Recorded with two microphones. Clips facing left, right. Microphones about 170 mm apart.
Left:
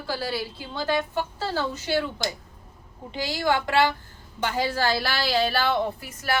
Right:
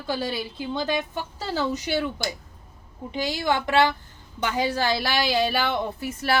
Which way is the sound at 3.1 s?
20° right (ahead or behind).